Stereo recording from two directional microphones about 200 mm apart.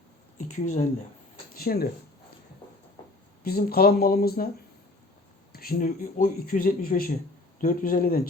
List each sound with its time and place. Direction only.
0.6 s speech: 40° left (ahead or behind)
1.5 s speech: 50° left (ahead or behind)
3.4 s speech: 50° left (ahead or behind)
5.5 s speech: 45° left (ahead or behind)